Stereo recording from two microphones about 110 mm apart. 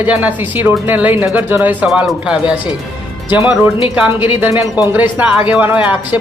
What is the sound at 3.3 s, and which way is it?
Speech, 15° right (ahead or behind).